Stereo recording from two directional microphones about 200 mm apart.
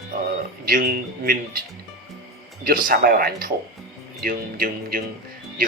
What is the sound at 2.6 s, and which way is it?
Speech, 45° right (ahead or behind).